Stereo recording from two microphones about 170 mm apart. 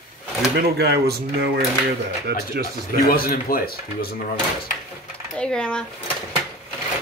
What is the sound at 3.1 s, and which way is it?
Speech, 60° left (ahead or behind).